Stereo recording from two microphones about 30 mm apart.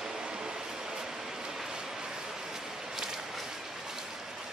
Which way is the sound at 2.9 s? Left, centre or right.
Centre.